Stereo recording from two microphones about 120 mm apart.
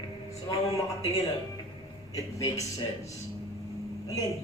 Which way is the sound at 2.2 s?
30° left (ahead or behind).